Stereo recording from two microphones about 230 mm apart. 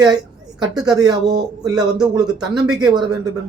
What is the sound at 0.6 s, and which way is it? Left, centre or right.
Speech, centre.